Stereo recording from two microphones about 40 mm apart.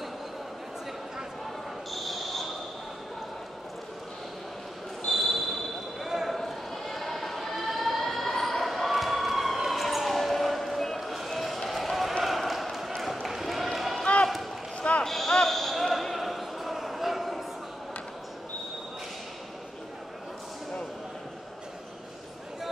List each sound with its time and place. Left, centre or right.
1.9 s basketball bounce: centre
5.1 s basketball bounce: centre
6.3 s a sound: centre
8.3 s basketball bounce: centre
14.8 s basketball bounce: left
15.0 s basketball bounce: centre